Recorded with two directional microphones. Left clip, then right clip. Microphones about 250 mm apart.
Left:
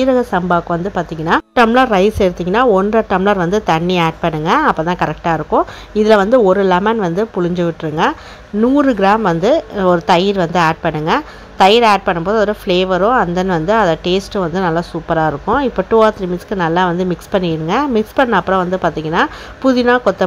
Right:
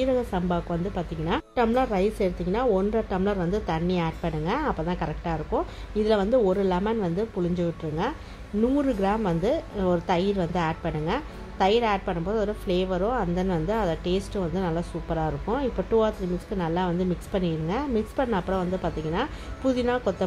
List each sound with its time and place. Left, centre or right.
0.0 s a woman's voice: left